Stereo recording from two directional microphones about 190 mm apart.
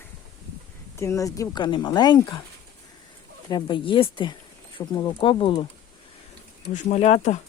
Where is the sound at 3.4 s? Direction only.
25° left (ahead or behind).